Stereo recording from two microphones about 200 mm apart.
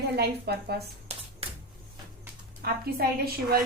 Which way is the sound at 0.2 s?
55° right (ahead or behind).